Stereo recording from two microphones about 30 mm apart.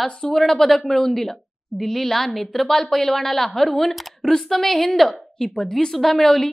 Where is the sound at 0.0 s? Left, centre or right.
Left.